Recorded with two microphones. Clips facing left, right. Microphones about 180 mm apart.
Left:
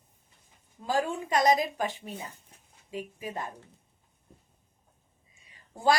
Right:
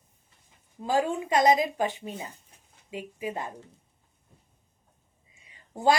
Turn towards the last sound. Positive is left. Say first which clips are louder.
# right 2 dB
turn(degrees=-20)  # may be behind; listen again after turning